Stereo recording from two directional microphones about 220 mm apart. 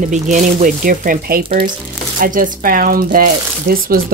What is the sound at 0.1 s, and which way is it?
Speech, 35° right (ahead or behind).